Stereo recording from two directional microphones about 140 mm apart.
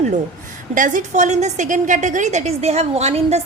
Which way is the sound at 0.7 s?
70° right (ahead or behind).